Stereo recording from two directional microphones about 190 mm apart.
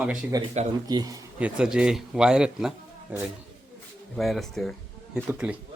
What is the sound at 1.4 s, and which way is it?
A man's voice, 5° right (ahead or behind).